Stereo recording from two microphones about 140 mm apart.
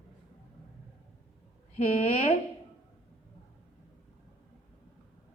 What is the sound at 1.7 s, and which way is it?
Speech, 45° left (ahead or behind).